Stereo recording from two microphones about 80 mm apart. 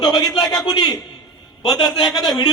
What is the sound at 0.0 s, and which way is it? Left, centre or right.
A man's voice, left.